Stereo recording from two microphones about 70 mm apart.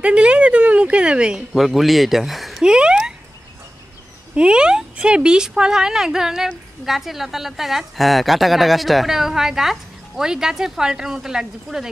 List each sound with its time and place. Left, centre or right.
0.0 s a woman's voice: centre
1.5 s speech: centre
2.6 s speech: centre
4.4 s speech: centre